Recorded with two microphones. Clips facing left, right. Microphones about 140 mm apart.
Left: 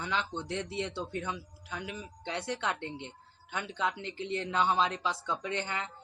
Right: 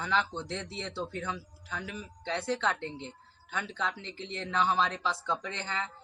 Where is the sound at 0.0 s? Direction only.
15° left (ahead or behind).